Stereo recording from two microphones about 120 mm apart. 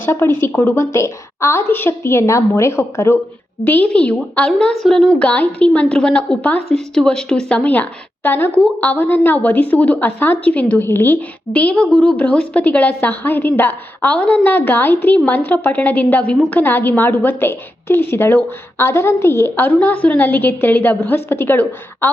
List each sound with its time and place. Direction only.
0.0 s a woman's voice: 20° left (ahead or behind)